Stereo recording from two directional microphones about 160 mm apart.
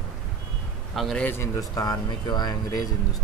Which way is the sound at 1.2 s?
15° left (ahead or behind).